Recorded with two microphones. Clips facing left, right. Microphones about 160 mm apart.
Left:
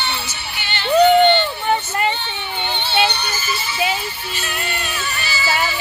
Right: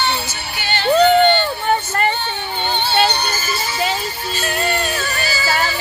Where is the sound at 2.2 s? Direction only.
40° right (ahead or behind).